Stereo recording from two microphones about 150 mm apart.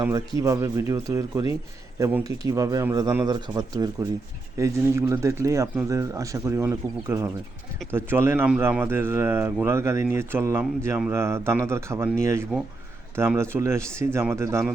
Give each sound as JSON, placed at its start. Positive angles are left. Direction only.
{"t": 0.0, "sound": "speech", "side_deg": -25}